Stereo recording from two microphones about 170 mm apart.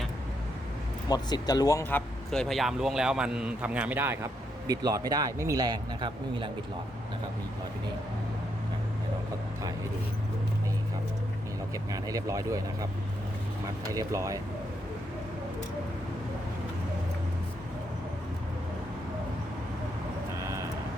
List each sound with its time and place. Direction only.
1.0 s speech: 25° left (ahead or behind); by 6.5 s 25° right (ahead or behind)
11.7 s speech: 20° right (ahead or behind)
20.4 s vehicle: 15° right (ahead or behind)